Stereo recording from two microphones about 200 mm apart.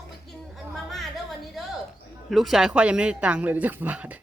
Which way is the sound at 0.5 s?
Centre (ahead or behind).